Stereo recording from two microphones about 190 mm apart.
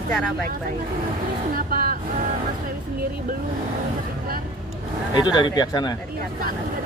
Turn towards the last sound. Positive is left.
turn(degrees=20)  # may be behind; listen again after turning